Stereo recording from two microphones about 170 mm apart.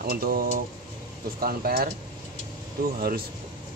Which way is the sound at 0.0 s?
60° right (ahead or behind).